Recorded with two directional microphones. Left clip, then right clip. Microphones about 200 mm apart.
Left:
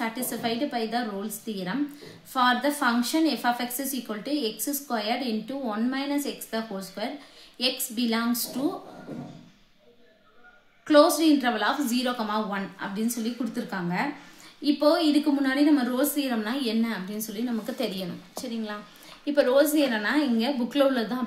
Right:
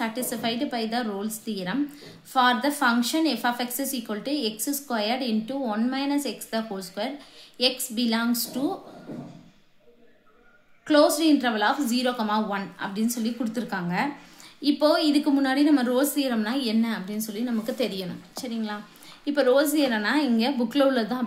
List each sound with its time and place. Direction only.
0.0 s a woman's voice: 25° right (ahead or behind)
10.9 s a woman's voice: 20° right (ahead or behind)